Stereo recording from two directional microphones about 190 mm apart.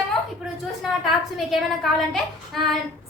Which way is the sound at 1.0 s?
Centre (ahead or behind).